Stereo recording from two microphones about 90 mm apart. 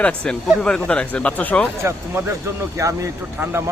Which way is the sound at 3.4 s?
25° right (ahead or behind).